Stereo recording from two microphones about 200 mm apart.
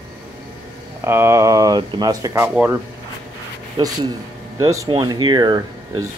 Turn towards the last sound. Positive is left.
turn(degrees=-20)  # may be behind; listen again after turning